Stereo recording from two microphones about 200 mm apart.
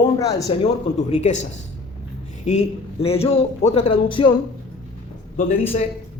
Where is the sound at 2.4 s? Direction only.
30° left (ahead or behind).